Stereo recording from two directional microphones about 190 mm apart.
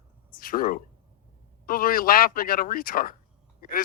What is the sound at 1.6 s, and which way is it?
Speech, 50° left (ahead or behind).